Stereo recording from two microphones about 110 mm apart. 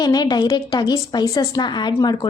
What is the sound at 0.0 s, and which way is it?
A woman's voice, 40° left (ahead or behind).